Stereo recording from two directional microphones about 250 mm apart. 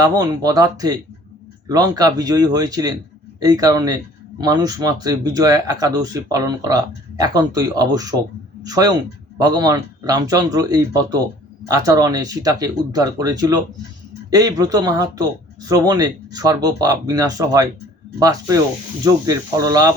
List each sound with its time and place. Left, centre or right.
0.0 s speech: centre